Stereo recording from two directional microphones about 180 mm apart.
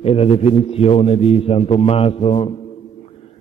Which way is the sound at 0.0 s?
35° left (ahead or behind).